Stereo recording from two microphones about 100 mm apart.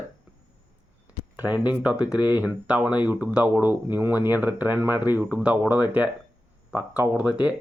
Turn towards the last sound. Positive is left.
turn(degrees=-15)  # may be behind; listen again after turning